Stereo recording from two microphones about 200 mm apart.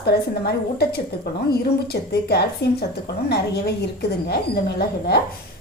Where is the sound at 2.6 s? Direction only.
60° left (ahead or behind).